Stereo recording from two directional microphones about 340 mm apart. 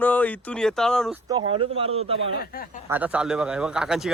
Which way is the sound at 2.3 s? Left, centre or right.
Left.